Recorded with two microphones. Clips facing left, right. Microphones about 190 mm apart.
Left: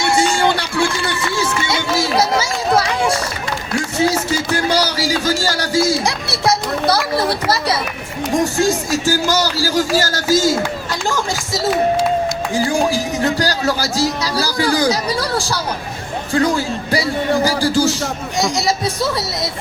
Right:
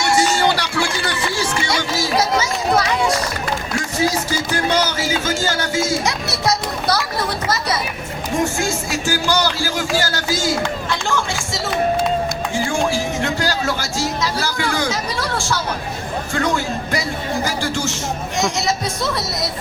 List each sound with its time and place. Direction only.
0.2 s run: 25° left (ahead or behind)
3.9 s speech: 30° left (ahead or behind)
8.5 s speech: 40° left (ahead or behind)
12.5 s a sound: 35° left (ahead or behind)
12.9 s speech: 35° left (ahead or behind)